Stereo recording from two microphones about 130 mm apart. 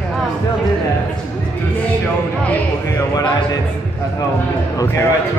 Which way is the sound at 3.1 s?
30° left (ahead or behind).